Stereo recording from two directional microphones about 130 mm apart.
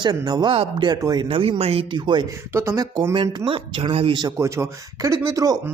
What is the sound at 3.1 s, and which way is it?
Speech, 40° right (ahead or behind).